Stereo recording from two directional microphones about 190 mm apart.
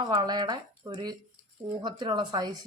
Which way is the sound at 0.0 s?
20° right (ahead or behind).